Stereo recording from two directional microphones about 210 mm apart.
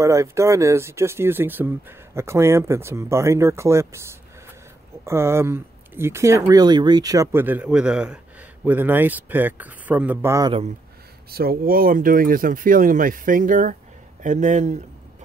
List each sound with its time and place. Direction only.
0.0 s speech: 15° right (ahead or behind)
5.0 s speech: 10° right (ahead or behind)
11.2 s speech: 45° right (ahead or behind)